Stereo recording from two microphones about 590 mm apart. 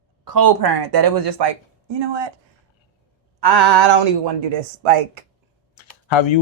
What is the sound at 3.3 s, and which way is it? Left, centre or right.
Speech, right.